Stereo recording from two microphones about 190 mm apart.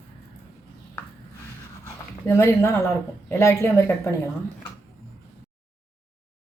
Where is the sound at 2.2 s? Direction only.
15° left (ahead or behind).